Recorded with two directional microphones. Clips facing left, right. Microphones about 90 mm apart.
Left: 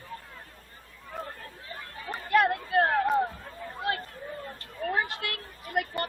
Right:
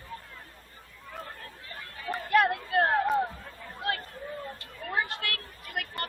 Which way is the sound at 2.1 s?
Centre (ahead or behind).